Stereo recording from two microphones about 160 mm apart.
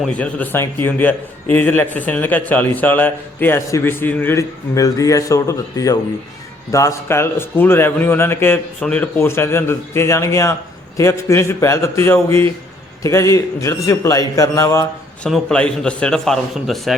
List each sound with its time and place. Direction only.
0.0 s a man's voice: 10° left (ahead or behind)
15.2 s a man's voice: 5° left (ahead or behind)